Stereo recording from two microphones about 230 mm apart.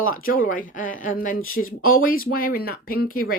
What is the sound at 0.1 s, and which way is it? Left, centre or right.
Speech, left.